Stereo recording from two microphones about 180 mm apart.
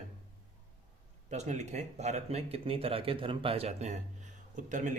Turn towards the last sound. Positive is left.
turn(degrees=-45)  # may be behind; listen again after turning